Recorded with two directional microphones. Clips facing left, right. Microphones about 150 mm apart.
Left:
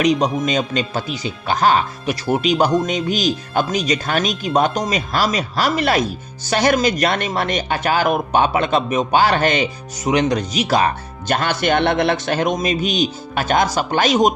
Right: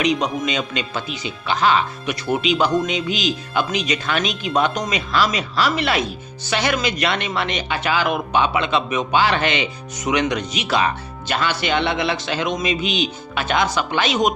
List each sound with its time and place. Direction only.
0.0 s speech: 40° left (ahead or behind)